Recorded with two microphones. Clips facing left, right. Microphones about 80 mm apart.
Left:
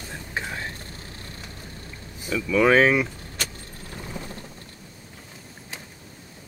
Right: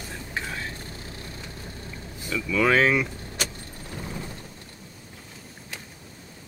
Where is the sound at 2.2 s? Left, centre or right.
Centre.